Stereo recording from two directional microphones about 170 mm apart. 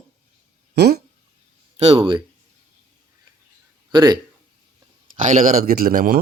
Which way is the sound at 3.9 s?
25° right (ahead or behind).